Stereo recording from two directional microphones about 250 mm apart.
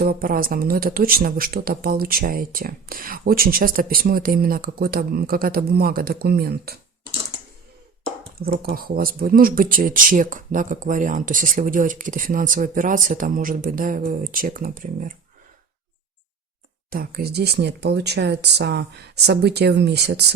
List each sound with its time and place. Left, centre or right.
0.0 s speech: right
8.4 s speech: right
16.9 s speech: right